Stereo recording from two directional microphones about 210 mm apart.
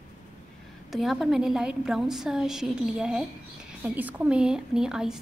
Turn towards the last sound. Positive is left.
turn(degrees=0)  # may be behind; listen again after turning